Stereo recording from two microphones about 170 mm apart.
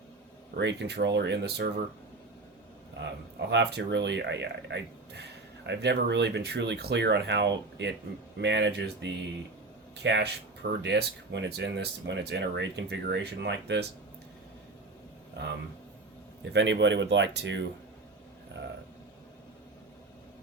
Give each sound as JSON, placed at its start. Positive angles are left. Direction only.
{"t": 0.5, "sound": "speech", "side_deg": -85}
{"t": 3.5, "sound": "speech", "side_deg": -85}
{"t": 16.4, "sound": "speech", "side_deg": -90}